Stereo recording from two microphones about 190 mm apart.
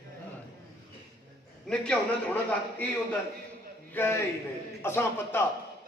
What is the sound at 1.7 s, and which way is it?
Speech, 5° left (ahead or behind).